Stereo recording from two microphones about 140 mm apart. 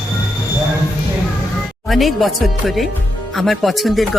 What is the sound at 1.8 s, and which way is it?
Speech, centre (ahead or behind).